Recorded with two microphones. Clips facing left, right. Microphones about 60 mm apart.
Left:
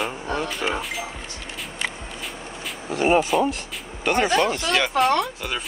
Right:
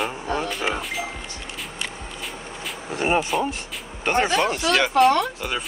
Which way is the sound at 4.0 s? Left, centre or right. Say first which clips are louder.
Even; right.